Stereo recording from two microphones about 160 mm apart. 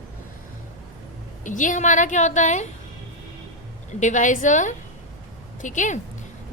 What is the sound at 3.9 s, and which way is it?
A woman's voice, 50° left (ahead or behind).